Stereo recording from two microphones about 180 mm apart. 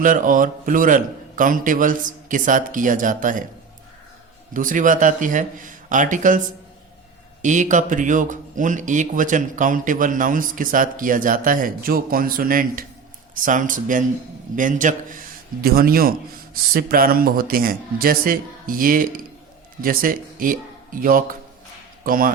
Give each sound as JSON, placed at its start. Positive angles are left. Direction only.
{"t": 0.0, "sound": "speech", "side_deg": -50}
{"t": 4.5, "sound": "speech", "side_deg": -45}
{"t": 7.4, "sound": "speech", "side_deg": -45}
{"t": 15.6, "sound": "a man's voice", "side_deg": -55}